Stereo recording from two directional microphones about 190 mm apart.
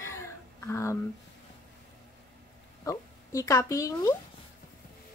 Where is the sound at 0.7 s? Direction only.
15° left (ahead or behind).